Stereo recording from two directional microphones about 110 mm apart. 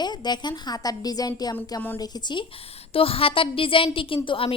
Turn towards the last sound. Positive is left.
turn(degrees=55)  # may be behind; listen again after turning